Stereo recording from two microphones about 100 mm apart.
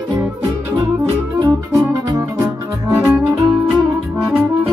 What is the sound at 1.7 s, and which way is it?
Music, 30° right (ahead or behind).